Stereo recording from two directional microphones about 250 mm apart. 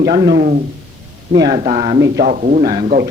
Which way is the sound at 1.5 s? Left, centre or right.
Right.